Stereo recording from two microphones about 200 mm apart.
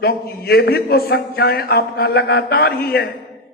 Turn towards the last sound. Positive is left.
turn(degrees=50)  # may be behind; listen again after turning